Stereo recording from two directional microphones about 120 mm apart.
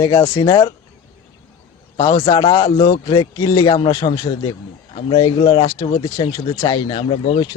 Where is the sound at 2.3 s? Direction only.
35° left (ahead or behind).